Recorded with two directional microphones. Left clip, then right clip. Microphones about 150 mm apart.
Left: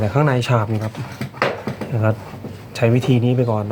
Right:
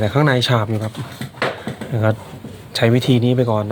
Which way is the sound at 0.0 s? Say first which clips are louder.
Right 2 dB; 10° right (ahead or behind).